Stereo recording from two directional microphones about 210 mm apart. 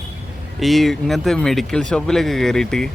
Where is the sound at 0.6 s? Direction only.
Centre (ahead or behind).